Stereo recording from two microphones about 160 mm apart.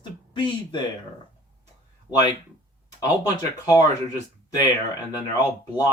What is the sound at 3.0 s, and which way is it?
Speech, 25° left (ahead or behind).